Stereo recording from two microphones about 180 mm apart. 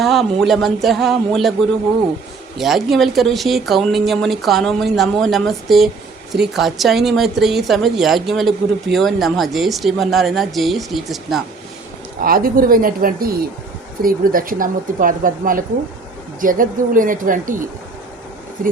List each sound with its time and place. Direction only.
0.0 s speech: centre (ahead or behind)
2.6 s speech: centre (ahead or behind)
12.2 s a woman's voice: 55° right (ahead or behind)